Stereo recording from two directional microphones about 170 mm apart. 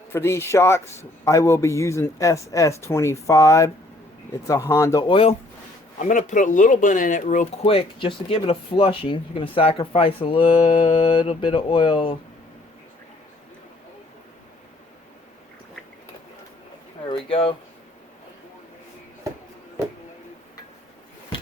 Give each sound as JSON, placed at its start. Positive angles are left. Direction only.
{"t": 0.1, "sound": "a man's voice", "side_deg": 15}
{"t": 6.0, "sound": "speech", "side_deg": 45}
{"t": 7.6, "sound": "speech", "side_deg": 30}
{"t": 17.1, "sound": "a sound", "side_deg": 30}